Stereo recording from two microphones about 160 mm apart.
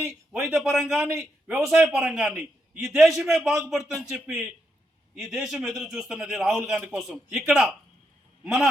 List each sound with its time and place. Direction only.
0.3 s a man's voice: 5° right (ahead or behind)